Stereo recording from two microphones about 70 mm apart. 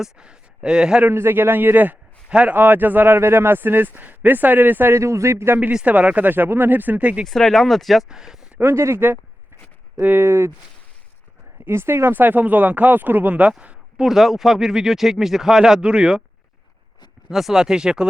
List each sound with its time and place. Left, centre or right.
0.0 s speech: centre
1.1 s speech: right
4.9 s speech: right
5.8 s speech: right
7.3 s speech: centre
8.5 s speech: right
11.6 s speech: right; by 16.2 s centre
17.2 s speech: centre